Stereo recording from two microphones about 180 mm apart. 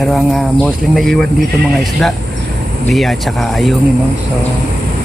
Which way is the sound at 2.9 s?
Centre (ahead or behind).